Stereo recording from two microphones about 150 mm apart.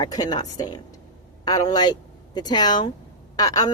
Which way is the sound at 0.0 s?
25° left (ahead or behind).